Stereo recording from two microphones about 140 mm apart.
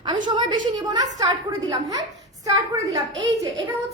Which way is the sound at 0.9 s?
30° right (ahead or behind).